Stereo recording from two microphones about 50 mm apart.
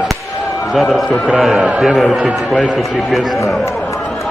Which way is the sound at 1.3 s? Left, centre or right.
Centre.